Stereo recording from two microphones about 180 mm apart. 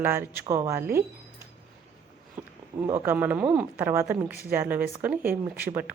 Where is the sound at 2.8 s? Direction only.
15° right (ahead or behind).